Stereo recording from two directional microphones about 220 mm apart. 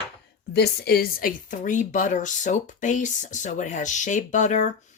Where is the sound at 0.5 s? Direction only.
45° left (ahead or behind).